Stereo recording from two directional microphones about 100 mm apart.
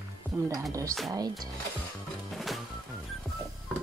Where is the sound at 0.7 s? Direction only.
35° right (ahead or behind).